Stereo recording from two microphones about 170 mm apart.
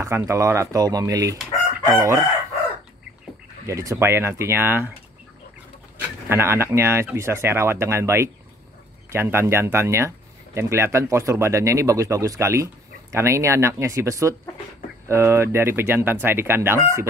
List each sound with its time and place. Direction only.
0.0 s speech: 20° right (ahead or behind)
3.6 s speech: 20° right (ahead or behind)
5.9 s speech: 15° right (ahead or behind)